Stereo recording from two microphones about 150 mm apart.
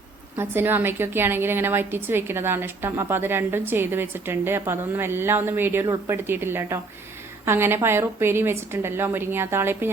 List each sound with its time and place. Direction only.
0.3 s a woman's voice: 15° right (ahead or behind)